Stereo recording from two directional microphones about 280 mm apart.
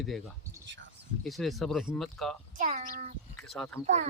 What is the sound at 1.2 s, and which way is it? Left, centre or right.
Speech, centre.